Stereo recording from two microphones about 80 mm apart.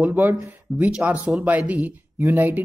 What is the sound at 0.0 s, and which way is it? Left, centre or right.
Speech, right.